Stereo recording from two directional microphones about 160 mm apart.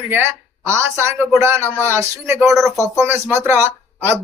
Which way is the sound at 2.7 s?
15° right (ahead or behind).